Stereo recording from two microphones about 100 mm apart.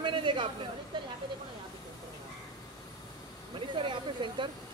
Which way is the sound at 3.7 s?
55° right (ahead or behind).